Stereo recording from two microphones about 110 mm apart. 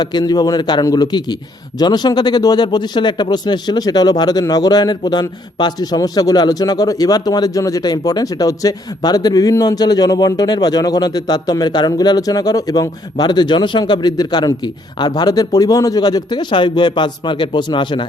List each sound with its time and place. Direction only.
0.0 s a man's voice: 40° left (ahead or behind)